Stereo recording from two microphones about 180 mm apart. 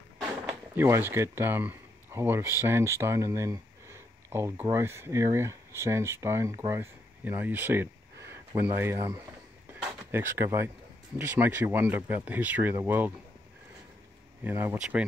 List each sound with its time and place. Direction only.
0.5 s speech: 15° right (ahead or behind)
14.4 s speech: 10° right (ahead or behind)